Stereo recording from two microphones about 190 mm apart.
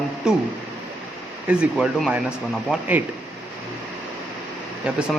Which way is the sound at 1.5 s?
5° right (ahead or behind).